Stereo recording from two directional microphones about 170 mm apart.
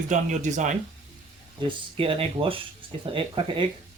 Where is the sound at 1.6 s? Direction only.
30° right (ahead or behind).